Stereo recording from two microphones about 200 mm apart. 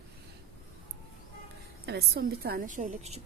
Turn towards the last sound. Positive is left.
turn(degrees=-35)  # may be behind; listen again after turning